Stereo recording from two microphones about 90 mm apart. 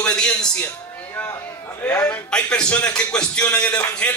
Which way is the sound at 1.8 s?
20° left (ahead or behind).